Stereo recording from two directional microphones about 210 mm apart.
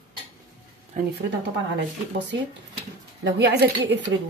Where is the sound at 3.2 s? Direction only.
50° right (ahead or behind).